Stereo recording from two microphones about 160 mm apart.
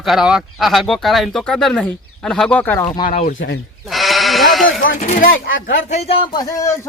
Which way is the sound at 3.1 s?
45° left (ahead or behind).